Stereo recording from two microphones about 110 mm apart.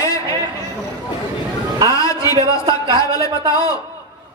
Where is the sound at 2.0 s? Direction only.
30° left (ahead or behind).